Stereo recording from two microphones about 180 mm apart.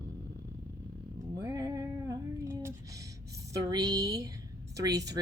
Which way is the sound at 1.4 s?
20° right (ahead or behind).